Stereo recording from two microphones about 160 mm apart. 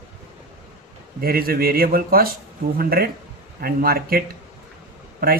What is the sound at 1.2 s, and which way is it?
Speech, 70° right (ahead or behind).